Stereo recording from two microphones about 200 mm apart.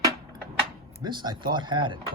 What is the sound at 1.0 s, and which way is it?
Speech, 20° right (ahead or behind).